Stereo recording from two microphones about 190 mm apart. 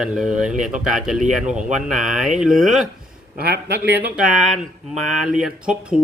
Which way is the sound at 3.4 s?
55° right (ahead or behind).